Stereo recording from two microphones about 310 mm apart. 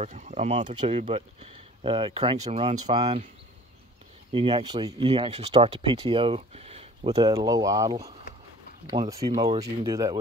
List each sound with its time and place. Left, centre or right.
0.0 s speech: right
4.3 s speech: centre